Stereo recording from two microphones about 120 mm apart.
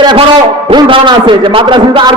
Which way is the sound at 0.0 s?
45° right (ahead or behind).